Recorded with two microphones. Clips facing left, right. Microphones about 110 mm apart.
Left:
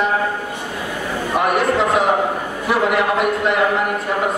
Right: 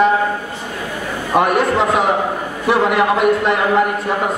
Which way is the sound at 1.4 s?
Centre (ahead or behind).